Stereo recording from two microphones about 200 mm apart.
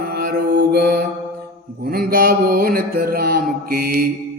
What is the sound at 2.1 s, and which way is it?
Mantra, 45° right (ahead or behind).